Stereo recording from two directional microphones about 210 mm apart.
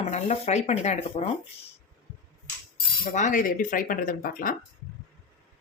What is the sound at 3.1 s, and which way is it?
Speech, 35° left (ahead or behind).